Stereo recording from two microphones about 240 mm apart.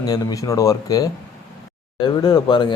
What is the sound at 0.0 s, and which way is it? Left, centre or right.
Speech, centre.